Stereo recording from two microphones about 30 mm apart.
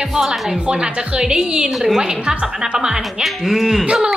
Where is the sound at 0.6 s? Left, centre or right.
Right.